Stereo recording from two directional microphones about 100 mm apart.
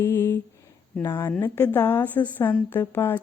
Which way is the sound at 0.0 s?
25° left (ahead or behind).